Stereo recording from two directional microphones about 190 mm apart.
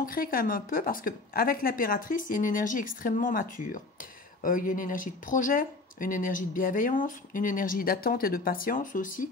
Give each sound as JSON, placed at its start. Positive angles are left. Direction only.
{"t": 0.0, "sound": "a woman's voice", "side_deg": 50}